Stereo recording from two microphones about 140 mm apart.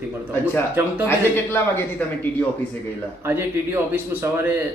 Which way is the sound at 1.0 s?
15° left (ahead or behind).